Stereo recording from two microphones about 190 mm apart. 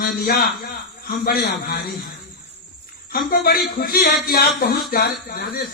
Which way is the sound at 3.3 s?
50° left (ahead or behind).